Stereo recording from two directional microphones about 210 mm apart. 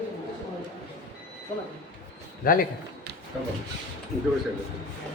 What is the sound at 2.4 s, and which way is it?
Speech, 45° left (ahead or behind).